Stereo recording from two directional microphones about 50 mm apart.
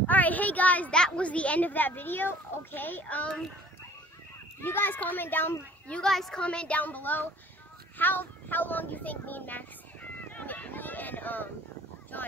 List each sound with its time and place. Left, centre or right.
0.0 s a sound: left
0.9 s a child's voice: centre; by 3.3 s left
4.6 s a child's voice: left
6.0 s a woman's voice: centre
6.4 s speech: left
6.8 s a child's voice: left